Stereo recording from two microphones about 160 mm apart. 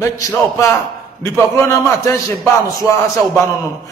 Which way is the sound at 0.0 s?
15° left (ahead or behind).